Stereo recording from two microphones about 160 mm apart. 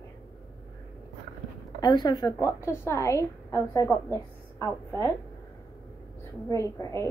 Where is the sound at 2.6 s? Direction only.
15° left (ahead or behind).